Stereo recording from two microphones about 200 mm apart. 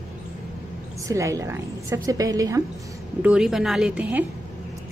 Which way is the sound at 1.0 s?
15° right (ahead or behind).